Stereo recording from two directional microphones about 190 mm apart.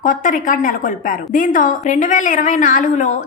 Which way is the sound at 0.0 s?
45° left (ahead or behind).